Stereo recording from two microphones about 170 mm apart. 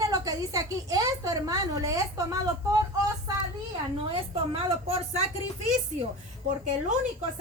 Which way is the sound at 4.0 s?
30° right (ahead or behind).